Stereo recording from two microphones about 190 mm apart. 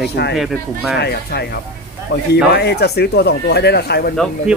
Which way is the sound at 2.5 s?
60° left (ahead or behind).